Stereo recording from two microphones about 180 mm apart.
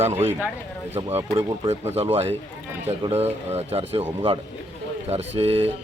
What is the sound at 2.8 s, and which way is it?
Speech, 35° right (ahead or behind).